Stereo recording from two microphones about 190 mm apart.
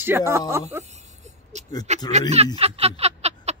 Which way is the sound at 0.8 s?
35° right (ahead or behind).